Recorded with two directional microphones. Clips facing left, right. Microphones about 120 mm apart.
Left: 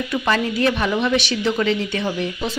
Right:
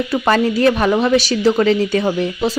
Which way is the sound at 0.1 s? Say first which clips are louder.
Right 5 dB; 40° right (ahead or behind).